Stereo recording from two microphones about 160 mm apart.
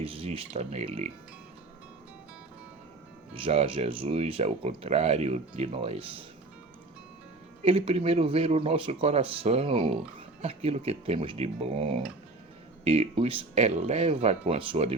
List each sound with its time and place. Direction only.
0.0 s speech: 35° right (ahead or behind)
3.3 s speech: 35° right (ahead or behind)
7.6 s speech: 40° right (ahead or behind)